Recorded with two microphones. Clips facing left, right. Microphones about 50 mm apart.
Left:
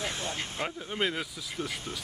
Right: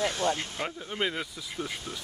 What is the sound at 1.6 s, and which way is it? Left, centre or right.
Speech, centre.